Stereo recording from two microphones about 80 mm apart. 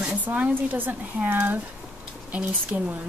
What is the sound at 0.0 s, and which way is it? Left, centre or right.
Speech, right.